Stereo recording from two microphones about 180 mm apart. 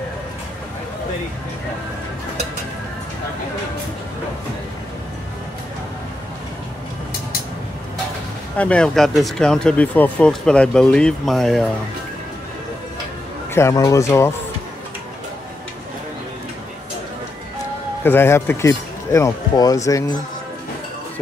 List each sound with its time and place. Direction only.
8.5 s speech: 5° left (ahead or behind)
13.5 s speech: 15° left (ahead or behind)
18.0 s speech: 10° left (ahead or behind)